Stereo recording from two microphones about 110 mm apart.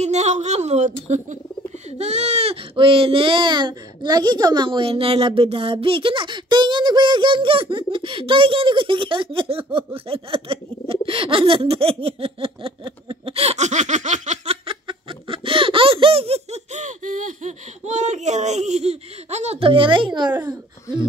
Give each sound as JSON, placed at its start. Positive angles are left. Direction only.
{"t": 0.0, "sound": "speech", "side_deg": -90}
{"t": 14.7, "sound": "giggle", "side_deg": -55}
{"t": 17.5, "sound": "speech", "side_deg": -90}
{"t": 19.6, "sound": "speech", "side_deg": -55}